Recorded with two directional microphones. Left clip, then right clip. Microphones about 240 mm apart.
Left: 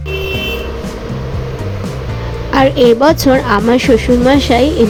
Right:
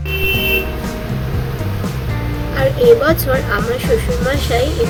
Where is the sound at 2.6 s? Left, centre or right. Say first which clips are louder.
Left 3 dB; left.